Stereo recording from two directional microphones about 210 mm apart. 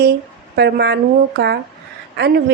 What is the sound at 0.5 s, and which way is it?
Speech, 50° right (ahead or behind).